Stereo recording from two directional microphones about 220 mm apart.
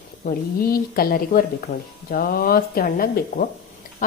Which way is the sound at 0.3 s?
40° left (ahead or behind).